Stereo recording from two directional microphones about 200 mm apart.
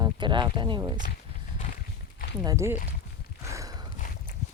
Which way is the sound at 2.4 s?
15° right (ahead or behind).